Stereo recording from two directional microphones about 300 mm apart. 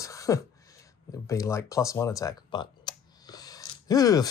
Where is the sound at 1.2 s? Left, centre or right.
Centre.